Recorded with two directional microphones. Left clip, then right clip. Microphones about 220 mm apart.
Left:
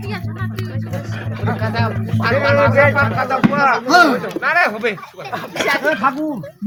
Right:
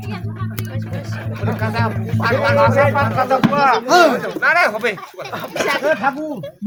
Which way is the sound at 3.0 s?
45° right (ahead or behind).